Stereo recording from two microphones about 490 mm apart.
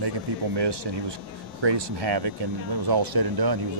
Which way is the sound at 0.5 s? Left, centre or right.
Right.